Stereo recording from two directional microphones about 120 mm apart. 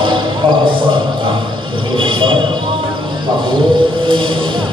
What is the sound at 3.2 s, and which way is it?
Music, 40° right (ahead or behind).